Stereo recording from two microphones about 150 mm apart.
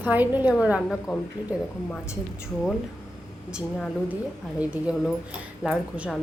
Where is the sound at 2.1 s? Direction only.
5° right (ahead or behind).